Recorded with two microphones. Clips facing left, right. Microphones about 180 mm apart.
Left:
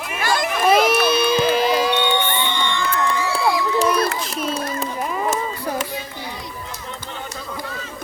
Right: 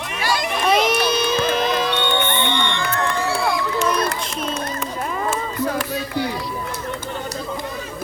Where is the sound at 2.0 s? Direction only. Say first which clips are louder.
Even; 55° right (ahead or behind).